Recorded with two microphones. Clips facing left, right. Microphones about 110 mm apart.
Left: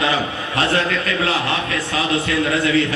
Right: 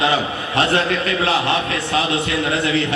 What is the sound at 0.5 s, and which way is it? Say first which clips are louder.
A man's voice: right 2 dB; 25° right (ahead or behind).